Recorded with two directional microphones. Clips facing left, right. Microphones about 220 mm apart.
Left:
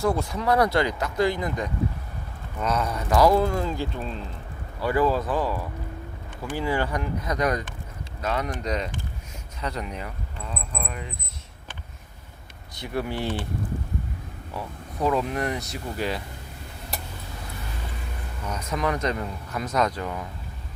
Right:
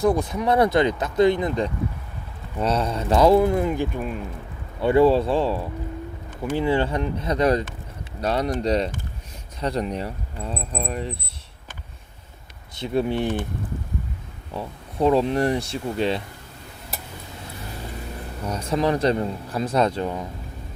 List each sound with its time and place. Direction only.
0.0 s speech: 20° right (ahead or behind)
4.8 s speech: 25° right (ahead or behind)
12.7 s speech: 25° right (ahead or behind)
14.5 s speech: 25° right (ahead or behind)
18.4 s speech: 30° right (ahead or behind)